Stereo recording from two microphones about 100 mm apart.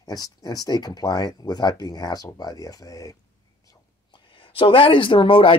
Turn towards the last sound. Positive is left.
turn(degrees=60)  # may be behind; listen again after turning